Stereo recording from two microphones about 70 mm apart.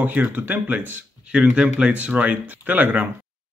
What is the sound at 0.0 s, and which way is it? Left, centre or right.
Speech, right.